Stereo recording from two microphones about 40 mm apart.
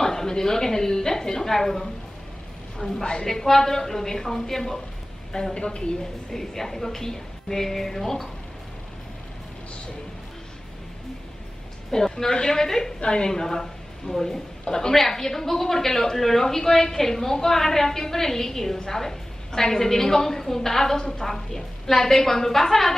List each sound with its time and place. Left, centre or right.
0.0 s a woman's voice: centre
2.8 s a woman's voice: centre
6.3 s a woman's voice: centre
11.9 s a woman's voice: centre